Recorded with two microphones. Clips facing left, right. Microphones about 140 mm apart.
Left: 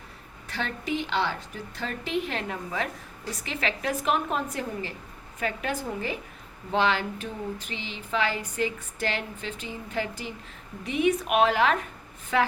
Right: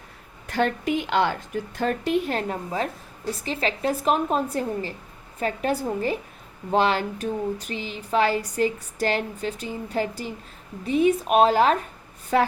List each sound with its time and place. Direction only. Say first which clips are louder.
0.4 s a woman's voice: right 8 dB; 50° right (ahead or behind)